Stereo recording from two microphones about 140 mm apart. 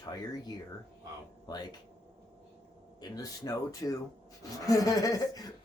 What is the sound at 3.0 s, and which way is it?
Speech, 25° left (ahead or behind).